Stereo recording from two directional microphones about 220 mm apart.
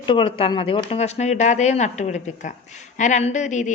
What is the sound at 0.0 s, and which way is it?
A woman's voice, 25° left (ahead or behind).